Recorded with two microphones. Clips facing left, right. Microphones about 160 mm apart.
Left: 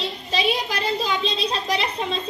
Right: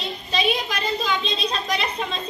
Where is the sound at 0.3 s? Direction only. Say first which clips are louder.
Even; 30° left (ahead or behind).